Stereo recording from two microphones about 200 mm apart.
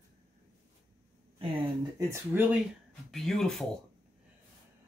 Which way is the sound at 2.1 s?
10° right (ahead or behind).